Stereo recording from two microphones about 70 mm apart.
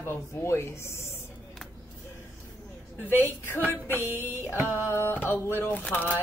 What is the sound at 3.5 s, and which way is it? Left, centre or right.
Speech, left.